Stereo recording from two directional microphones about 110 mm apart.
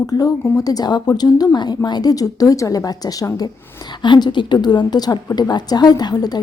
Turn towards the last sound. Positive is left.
turn(degrees=40)  # may be behind; listen again after turning